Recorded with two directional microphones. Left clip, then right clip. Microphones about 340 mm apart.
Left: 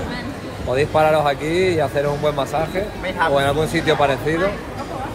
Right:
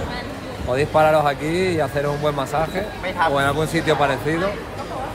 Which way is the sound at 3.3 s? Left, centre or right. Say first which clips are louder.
Left 2 dB; centre.